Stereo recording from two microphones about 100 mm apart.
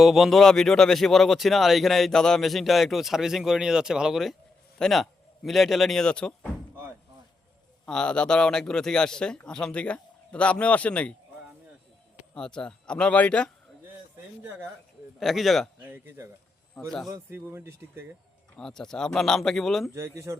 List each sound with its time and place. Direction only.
0.0 s speech: centre (ahead or behind)
7.9 s speech: 10° left (ahead or behind)
12.3 s speech: 5° left (ahead or behind)
15.2 s speech: centre (ahead or behind)
15.8 s speech: 20° right (ahead or behind)
16.8 s speech: 5° left (ahead or behind)
17.3 s speech: 25° right (ahead or behind)
18.5 s speech: 5° left (ahead or behind)
19.9 s speech: 30° right (ahead or behind)